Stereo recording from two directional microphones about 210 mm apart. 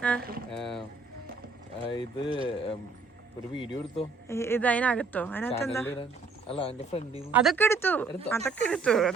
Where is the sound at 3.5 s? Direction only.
25° left (ahead or behind).